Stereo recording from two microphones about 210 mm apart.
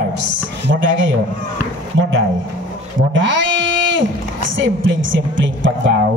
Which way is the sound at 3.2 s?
60° right (ahead or behind).